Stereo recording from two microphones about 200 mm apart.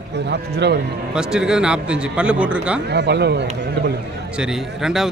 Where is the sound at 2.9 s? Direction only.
55° right (ahead or behind).